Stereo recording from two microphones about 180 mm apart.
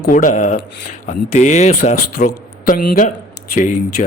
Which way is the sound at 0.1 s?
45° left (ahead or behind).